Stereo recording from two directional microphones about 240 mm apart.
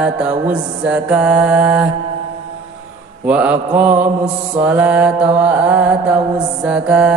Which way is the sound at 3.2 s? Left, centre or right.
Centre.